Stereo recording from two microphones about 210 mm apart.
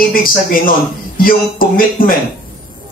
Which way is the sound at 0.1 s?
40° left (ahead or behind).